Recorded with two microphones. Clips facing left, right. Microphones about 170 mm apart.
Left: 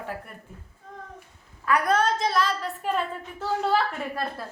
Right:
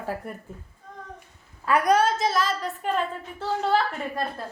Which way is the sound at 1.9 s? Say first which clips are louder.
Right 2 dB; 5° right (ahead or behind).